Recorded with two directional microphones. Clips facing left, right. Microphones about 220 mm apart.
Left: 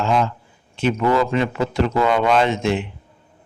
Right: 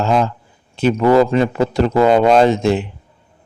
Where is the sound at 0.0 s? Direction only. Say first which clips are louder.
Right 3 dB; 40° right (ahead or behind).